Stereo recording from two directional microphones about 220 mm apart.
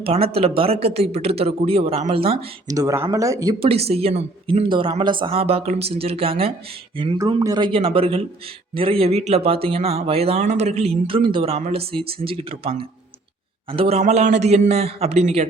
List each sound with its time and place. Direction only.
0.0 s speech: 25° right (ahead or behind)